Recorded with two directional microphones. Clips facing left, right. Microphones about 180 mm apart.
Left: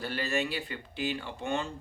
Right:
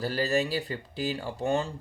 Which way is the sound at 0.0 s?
35° right (ahead or behind).